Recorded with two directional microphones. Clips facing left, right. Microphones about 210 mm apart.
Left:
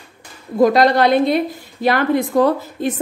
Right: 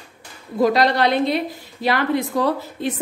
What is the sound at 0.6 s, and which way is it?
A woman's voice, 50° left (ahead or behind).